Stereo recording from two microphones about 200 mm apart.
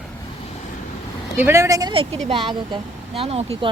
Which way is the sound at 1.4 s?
15° right (ahead or behind).